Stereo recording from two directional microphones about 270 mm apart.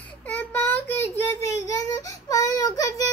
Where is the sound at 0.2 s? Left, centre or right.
Centre.